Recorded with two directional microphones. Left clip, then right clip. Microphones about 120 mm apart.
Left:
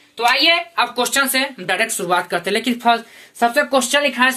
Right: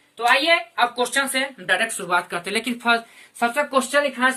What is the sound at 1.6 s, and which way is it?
Speech, 75° right (ahead or behind).